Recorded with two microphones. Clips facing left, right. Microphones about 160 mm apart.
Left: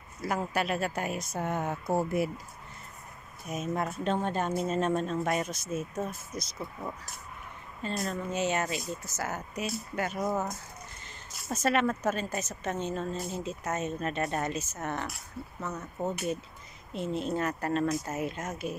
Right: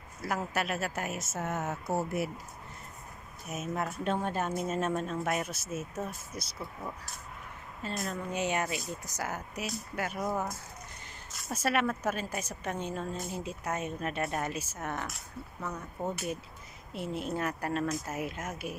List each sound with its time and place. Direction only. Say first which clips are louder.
0.2 s speech: left 2 dB; centre (ahead or behind)
3.4 s a woman's voice: left 3 dB; 5° right (ahead or behind)
7.8 s speech: left 3 dB; centre (ahead or behind)
8.3 s a woman's voice: left 1 dB; 15° right (ahead or behind)
11.5 s a woman's voice: left 3 dB; 10° right (ahead or behind)
16.0 s speech: left 2 dB; 25° left (ahead or behind)
16.9 s a woman's voice: left 3 dB; 10° right (ahead or behind)